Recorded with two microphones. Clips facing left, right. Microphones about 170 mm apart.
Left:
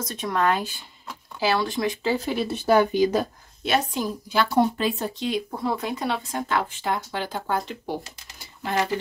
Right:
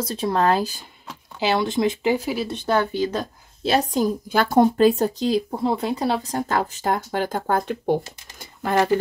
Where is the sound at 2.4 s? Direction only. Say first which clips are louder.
Left 2 dB; 10° left (ahead or behind).